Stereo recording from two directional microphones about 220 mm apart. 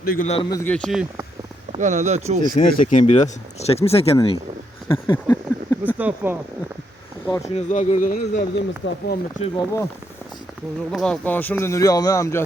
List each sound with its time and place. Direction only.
0.0 s speech: 40° left (ahead or behind)
0.6 s speech: 5° left (ahead or behind)
1.7 s speech: 35° right (ahead or behind)
2.6 s speech: 30° left (ahead or behind)
5.0 s a sound: 10° left (ahead or behind)
6.0 s speech: 5° right (ahead or behind)
7.5 s speech: 30° left (ahead or behind)
8.8 s speech: 55° left (ahead or behind)
9.4 s speech: 20° left (ahead or behind)
10.9 s a man's voice: 5° left (ahead or behind)